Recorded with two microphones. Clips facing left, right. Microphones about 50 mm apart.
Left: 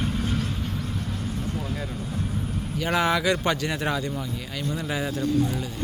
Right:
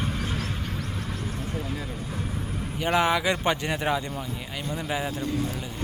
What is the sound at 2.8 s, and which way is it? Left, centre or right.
Speech, centre.